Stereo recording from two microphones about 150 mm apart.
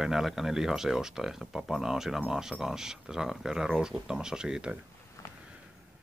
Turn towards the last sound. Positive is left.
turn(degrees=20)  # may be behind; listen again after turning